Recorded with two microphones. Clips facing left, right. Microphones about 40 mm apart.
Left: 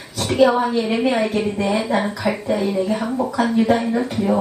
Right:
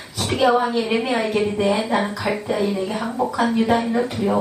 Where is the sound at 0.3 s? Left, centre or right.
Centre.